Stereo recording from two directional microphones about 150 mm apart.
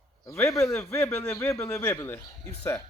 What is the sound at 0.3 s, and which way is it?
A man's voice, 20° left (ahead or behind).